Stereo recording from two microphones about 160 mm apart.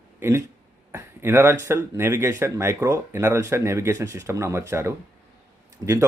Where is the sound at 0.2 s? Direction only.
15° right (ahead or behind).